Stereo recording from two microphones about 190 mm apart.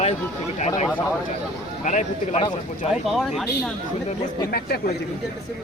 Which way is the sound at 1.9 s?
40° left (ahead or behind).